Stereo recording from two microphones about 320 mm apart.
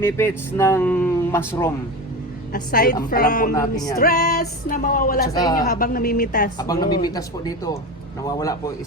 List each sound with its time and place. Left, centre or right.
0.0 s speech: centre
2.5 s speech: left
3.5 s speech: centre
3.9 s speech: left
5.4 s speech: centre
5.6 s speech: left
6.6 s speech: centre